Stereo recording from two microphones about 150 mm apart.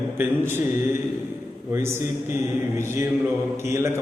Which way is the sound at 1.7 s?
15° right (ahead or behind).